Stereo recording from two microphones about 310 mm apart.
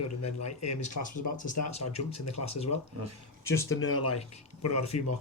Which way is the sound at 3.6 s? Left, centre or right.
Left.